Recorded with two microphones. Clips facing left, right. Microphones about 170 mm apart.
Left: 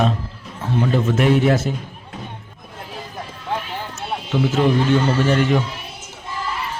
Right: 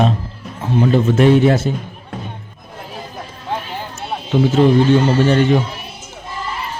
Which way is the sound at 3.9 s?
30° right (ahead or behind).